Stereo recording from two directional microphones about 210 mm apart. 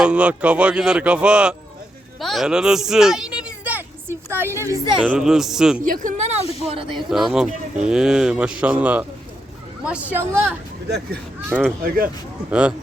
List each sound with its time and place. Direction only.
0.0 s a woman's voice: 5° right (ahead or behind)
5.0 s speech: centre (ahead or behind)
5.8 s a woman's voice: 40° right (ahead or behind)
7.1 s a woman's voice: centre (ahead or behind)
11.4 s a woman's voice: 10° right (ahead or behind)
11.8 s a woman's voice: 40° right (ahead or behind)
12.5 s speech: 5° right (ahead or behind)